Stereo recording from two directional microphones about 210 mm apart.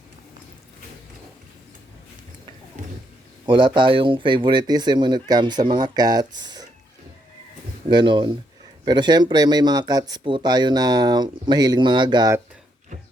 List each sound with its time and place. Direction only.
3.4 s speech: 25° right (ahead or behind)
7.9 s speech: 20° right (ahead or behind)